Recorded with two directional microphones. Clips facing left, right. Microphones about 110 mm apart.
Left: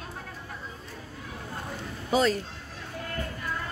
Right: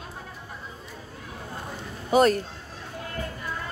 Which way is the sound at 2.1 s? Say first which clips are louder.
Right 5 dB; 55° right (ahead or behind).